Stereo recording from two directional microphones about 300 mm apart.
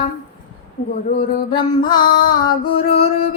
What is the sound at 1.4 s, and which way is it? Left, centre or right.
Music, centre.